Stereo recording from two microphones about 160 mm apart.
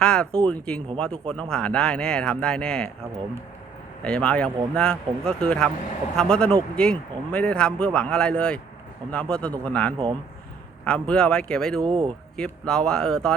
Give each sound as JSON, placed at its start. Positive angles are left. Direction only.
{"t": 0.0, "sound": "speech", "side_deg": 5}
{"t": 4.0, "sound": "a man's voice", "side_deg": 5}
{"t": 11.9, "sound": "speech", "side_deg": -30}
{"t": 12.4, "sound": "speech", "side_deg": 5}